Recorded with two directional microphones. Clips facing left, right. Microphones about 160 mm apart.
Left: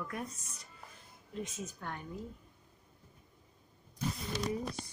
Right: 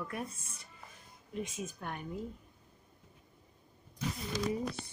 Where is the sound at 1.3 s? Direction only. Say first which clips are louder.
Right 2 dB; 15° right (ahead or behind).